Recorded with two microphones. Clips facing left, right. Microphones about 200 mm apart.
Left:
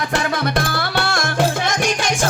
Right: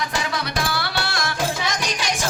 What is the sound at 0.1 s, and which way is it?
Music, 55° left (ahead or behind).